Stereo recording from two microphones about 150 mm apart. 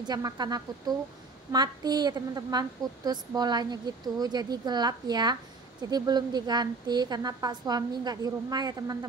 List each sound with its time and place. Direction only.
0.0 s a woman's voice: 25° right (ahead or behind)